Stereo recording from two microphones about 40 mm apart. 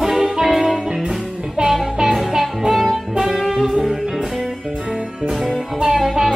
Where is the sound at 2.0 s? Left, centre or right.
Centre.